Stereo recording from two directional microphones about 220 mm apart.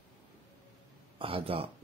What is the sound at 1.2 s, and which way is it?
Speech, 25° right (ahead or behind).